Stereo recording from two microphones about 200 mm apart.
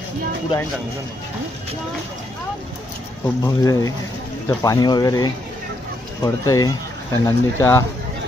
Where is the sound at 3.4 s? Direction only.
15° left (ahead or behind).